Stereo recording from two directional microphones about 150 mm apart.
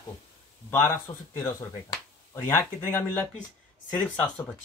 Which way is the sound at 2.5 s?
15° left (ahead or behind).